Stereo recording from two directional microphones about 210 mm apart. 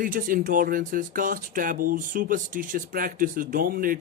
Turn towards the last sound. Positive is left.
turn(degrees=-40)  # may be behind; listen again after turning